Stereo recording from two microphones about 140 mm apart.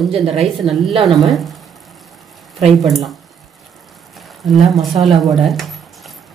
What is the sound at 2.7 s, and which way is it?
Speech, centre (ahead or behind).